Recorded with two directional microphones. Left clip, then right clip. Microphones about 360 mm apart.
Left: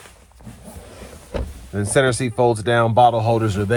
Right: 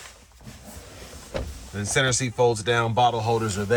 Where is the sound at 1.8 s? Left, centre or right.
Centre.